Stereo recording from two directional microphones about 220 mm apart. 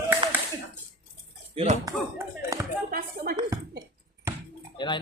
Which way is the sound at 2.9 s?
40° right (ahead or behind).